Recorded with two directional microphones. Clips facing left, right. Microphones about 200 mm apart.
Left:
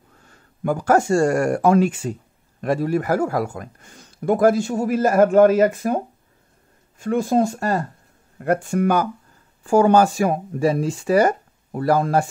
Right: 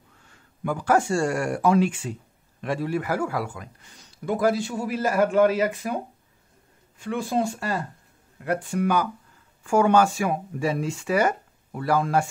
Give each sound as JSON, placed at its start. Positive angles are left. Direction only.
{"t": 0.3, "sound": "a man's voice", "side_deg": 45}
{"t": 9.6, "sound": "speech", "side_deg": 35}